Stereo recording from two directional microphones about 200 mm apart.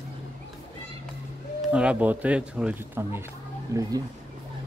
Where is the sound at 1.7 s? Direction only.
5° right (ahead or behind).